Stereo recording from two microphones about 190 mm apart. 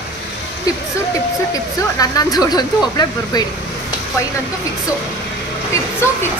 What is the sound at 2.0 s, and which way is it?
Speech, 20° left (ahead or behind).